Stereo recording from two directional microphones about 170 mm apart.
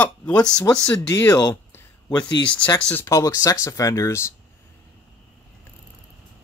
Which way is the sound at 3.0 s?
20° left (ahead or behind).